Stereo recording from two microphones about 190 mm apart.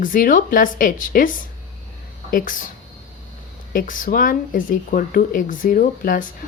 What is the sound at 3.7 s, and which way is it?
Speech, 45° left (ahead or behind).